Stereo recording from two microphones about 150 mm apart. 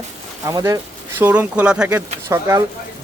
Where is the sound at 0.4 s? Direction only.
20° right (ahead or behind).